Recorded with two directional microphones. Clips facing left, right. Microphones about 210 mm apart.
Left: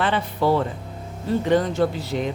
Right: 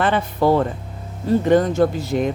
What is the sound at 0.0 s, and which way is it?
Speech, 50° right (ahead or behind).